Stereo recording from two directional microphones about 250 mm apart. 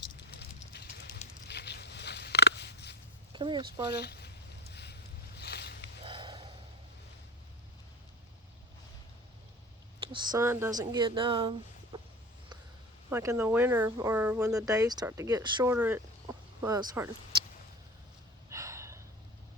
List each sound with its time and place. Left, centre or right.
0.7 s a sound: left
3.3 s speech: centre
3.9 s speech: left
4.7 s a sound: left
5.4 s boat: left
6.0 s snort: centre
10.0 s speech: centre
11.9 s a sound: centre
13.1 s speech: centre
18.4 s gasp: centre